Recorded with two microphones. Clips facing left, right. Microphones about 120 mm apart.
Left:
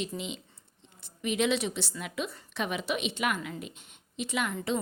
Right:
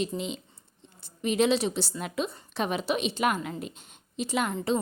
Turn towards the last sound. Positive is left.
turn(degrees=-35)  # may be behind; listen again after turning